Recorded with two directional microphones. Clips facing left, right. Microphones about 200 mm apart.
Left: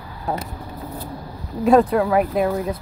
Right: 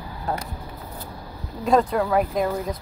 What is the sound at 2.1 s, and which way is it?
Speech, 5° left (ahead or behind).